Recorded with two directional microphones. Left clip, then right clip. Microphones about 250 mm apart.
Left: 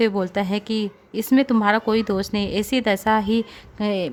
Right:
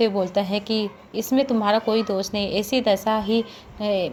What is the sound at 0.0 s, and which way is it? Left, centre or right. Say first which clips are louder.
A woman's voice: even; left.